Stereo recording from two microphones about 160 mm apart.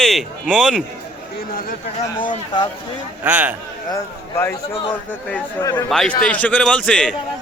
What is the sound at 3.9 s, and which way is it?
Speech, 15° left (ahead or behind).